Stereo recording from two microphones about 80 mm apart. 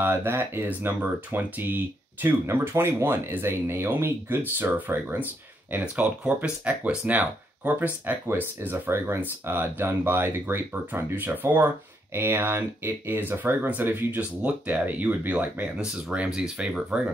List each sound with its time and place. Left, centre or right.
0.0 s speech: right; by 17.0 s centre